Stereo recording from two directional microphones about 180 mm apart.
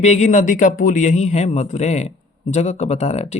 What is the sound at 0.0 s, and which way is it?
Speech, 40° left (ahead or behind).